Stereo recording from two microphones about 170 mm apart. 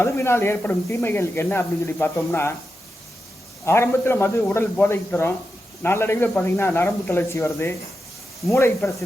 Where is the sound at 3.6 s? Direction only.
15° left (ahead or behind).